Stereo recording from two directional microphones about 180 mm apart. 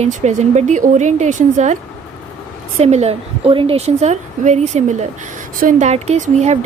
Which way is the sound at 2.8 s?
35° right (ahead or behind).